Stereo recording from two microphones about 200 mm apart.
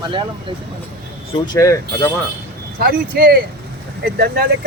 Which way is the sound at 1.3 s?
20° left (ahead or behind).